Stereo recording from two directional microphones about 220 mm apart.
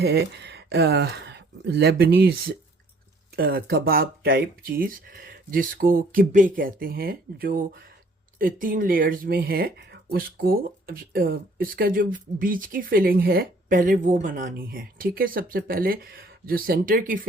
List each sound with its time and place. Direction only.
0.0 s speech: 50° right (ahead or behind)